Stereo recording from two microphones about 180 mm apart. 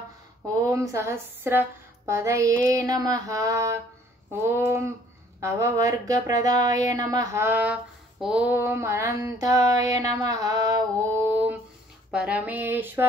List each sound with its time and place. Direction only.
0.6 s a woman's voice: 15° right (ahead or behind)
11.3 s a sound: 10° right (ahead or behind)
12.1 s a woman's voice: 5° right (ahead or behind)